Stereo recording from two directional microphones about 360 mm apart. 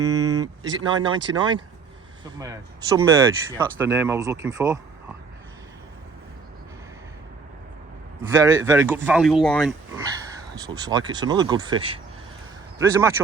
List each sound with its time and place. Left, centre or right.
0.1 s a sound: right
0.3 s a sound: centre
0.9 s speech: centre
8.3 s speech: centre
10.8 s speech: centre
12.8 s speech: centre